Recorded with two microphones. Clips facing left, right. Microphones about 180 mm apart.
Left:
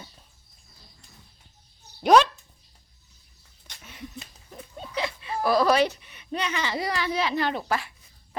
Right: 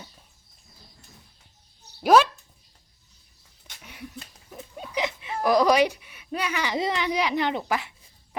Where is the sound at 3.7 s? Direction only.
10° right (ahead or behind).